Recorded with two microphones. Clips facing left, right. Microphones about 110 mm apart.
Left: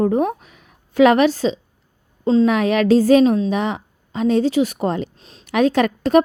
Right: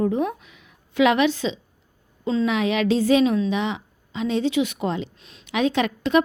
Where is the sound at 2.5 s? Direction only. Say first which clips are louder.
Left 6 dB; 50° left (ahead or behind).